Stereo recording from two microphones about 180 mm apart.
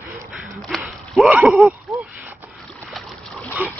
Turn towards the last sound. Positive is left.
turn(degrees=5)  # may be behind; listen again after turning